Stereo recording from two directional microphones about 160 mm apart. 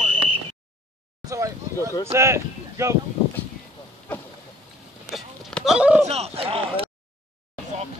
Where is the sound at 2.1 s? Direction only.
15° right (ahead or behind).